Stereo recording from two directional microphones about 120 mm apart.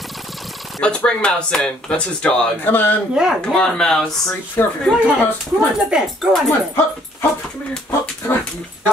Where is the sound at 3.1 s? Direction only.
5° right (ahead or behind).